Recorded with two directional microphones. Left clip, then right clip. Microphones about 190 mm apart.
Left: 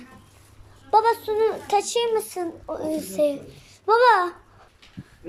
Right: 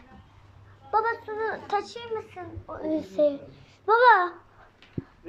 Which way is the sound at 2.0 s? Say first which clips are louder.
Left 10 dB; 35° left (ahead or behind).